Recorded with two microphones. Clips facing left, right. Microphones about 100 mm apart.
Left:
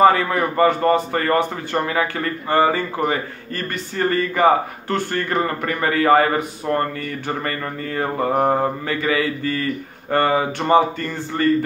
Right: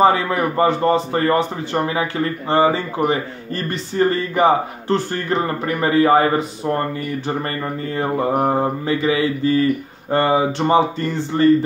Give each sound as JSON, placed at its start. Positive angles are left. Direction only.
{"t": 0.0, "sound": "a man's voice", "side_deg": -15}
{"t": 8.8, "sound": "a man's voice", "side_deg": -20}